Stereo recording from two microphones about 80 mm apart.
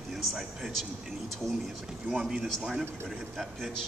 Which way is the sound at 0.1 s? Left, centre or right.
Centre.